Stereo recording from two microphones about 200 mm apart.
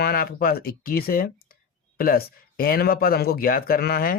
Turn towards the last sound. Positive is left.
turn(degrees=50)  # may be behind; listen again after turning